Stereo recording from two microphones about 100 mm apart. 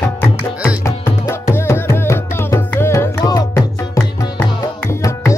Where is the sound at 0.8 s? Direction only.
25° left (ahead or behind).